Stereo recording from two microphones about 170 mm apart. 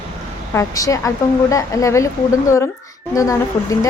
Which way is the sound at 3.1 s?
20° left (ahead or behind).